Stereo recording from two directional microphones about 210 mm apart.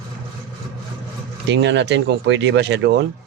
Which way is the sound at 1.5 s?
55° right (ahead or behind).